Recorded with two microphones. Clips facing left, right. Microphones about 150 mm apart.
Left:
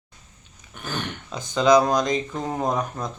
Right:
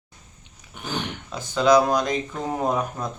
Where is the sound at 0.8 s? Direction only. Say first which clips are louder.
Right 1 dB; 15° right (ahead or behind).